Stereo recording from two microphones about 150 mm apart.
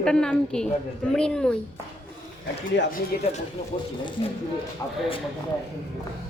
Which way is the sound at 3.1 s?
70° left (ahead or behind).